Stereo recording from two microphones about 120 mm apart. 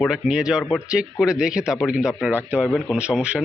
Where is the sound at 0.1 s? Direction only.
5° right (ahead or behind).